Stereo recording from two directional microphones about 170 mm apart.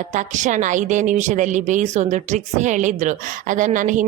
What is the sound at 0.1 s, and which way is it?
Speech, 45° right (ahead or behind).